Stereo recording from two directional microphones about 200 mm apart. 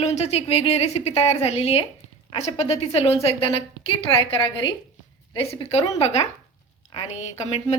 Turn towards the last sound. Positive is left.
turn(degrees=35)  # may be behind; listen again after turning